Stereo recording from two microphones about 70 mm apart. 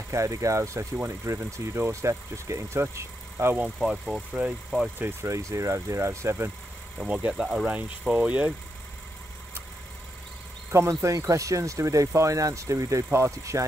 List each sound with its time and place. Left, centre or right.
0.1 s speech: right
3.8 s speech: centre
4.3 s speech: right
5.3 s speech: right
7.0 s speech: centre
7.6 s speech: centre
10.7 s speech: right